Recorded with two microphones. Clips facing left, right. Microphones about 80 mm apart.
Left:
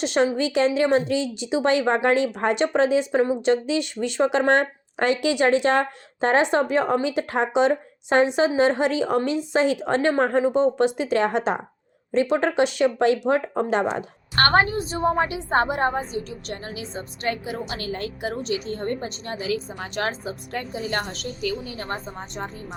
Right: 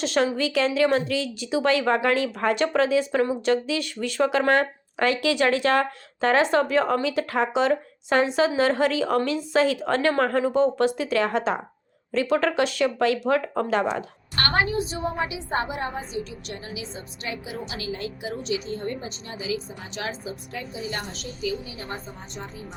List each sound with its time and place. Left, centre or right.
0.0 s a woman's voice: left